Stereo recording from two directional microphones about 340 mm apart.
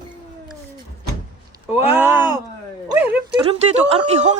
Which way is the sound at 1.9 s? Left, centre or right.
Centre.